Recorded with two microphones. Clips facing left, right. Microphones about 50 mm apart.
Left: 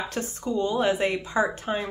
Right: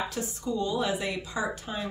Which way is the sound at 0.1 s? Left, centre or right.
Left.